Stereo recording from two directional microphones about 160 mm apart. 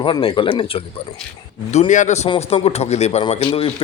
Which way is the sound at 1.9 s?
50° left (ahead or behind).